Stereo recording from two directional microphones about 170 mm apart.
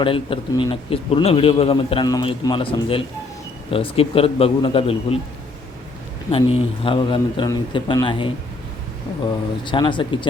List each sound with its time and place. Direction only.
0.0 s a man's voice: 30° left (ahead or behind)
6.3 s speech: 35° left (ahead or behind)
9.6 s speech: 30° left (ahead or behind)